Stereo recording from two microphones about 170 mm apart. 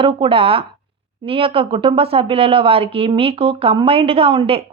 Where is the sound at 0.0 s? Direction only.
30° right (ahead or behind).